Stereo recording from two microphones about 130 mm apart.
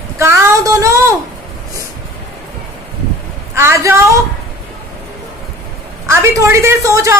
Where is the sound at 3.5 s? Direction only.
20° right (ahead or behind).